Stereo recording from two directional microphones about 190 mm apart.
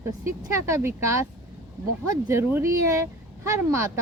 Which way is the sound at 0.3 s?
15° right (ahead or behind).